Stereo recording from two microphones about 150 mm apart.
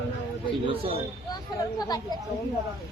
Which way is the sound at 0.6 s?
35° right (ahead or behind).